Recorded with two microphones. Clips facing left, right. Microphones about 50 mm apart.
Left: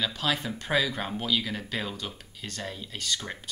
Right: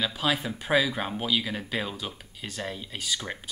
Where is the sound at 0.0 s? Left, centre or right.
Centre.